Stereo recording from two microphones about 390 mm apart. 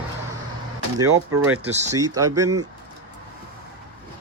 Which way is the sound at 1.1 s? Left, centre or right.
Right.